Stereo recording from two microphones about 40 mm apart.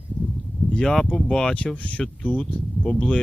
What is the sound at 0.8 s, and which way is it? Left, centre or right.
Speech, centre.